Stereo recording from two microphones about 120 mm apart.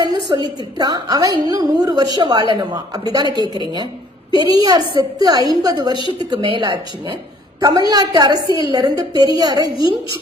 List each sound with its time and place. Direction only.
0.3 s a woman's voice: 40° right (ahead or behind)
9.6 s a woman's voice: 45° left (ahead or behind)